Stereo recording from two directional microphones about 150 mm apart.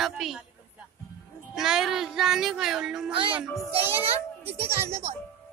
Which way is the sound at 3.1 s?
35° right (ahead or behind).